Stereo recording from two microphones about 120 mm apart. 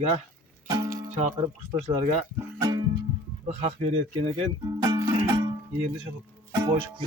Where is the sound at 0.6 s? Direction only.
30° right (ahead or behind).